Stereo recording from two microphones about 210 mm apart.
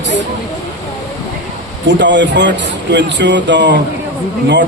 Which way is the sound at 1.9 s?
60° right (ahead or behind).